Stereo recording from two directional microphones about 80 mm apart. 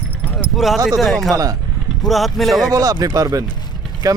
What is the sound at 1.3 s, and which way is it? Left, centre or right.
Speech, right.